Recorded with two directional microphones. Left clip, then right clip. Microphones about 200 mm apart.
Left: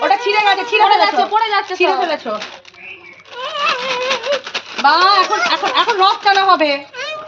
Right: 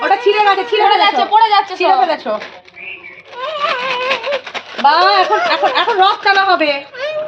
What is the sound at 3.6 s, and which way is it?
Speech, 45° left (ahead or behind).